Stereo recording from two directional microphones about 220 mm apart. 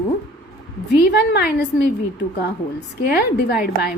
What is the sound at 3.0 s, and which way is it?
Speech, 45° left (ahead or behind).